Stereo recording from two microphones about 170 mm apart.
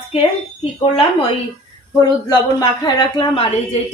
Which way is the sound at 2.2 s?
25° left (ahead or behind).